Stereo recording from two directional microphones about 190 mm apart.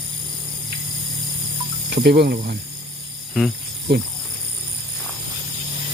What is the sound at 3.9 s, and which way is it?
Speech, 60° right (ahead or behind).